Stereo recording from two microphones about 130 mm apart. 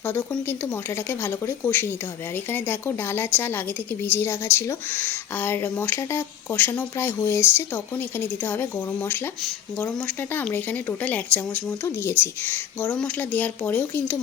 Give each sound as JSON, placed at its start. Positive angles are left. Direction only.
{"t": 0.1, "sound": "speech", "side_deg": 15}
{"t": 10.5, "sound": "speech", "side_deg": 15}